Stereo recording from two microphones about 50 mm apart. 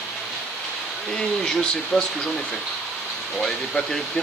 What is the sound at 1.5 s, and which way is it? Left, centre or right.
Speech, centre.